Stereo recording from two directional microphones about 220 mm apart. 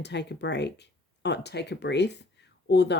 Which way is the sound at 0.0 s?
50° left (ahead or behind).